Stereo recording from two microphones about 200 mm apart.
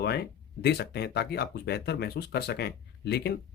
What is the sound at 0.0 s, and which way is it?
Speech, 55° left (ahead or behind).